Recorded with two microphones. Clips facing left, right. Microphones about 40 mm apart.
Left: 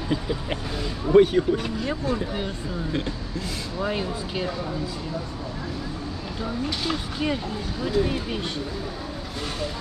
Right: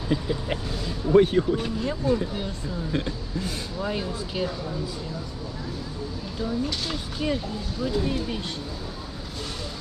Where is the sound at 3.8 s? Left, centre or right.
Centre.